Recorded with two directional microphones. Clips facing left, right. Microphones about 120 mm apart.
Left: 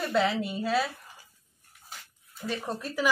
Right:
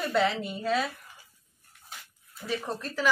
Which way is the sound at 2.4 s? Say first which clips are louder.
Even; centre (ahead or behind).